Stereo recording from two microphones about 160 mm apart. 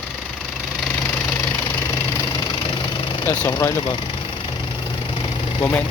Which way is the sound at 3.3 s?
20° left (ahead or behind).